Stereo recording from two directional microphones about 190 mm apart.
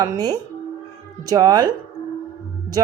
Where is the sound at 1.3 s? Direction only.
20° right (ahead or behind).